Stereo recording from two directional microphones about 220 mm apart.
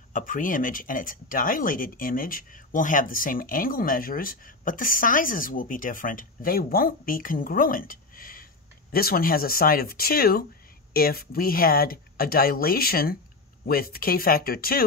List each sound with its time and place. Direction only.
0.1 s speech: 40° left (ahead or behind)